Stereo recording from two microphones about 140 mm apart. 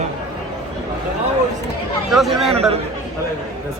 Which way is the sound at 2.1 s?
Centre (ahead or behind).